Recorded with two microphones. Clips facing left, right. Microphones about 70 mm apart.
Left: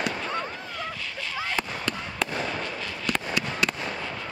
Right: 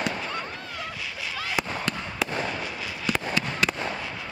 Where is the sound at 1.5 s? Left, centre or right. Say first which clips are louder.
Right 3 dB; centre.